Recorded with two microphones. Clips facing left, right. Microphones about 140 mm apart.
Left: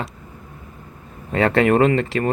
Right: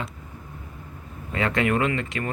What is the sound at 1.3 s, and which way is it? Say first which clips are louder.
Speech: left 7 dB; 40° left (ahead or behind).